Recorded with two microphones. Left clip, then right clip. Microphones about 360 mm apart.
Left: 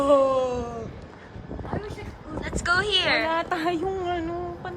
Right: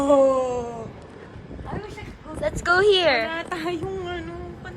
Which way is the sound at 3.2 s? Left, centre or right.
Left.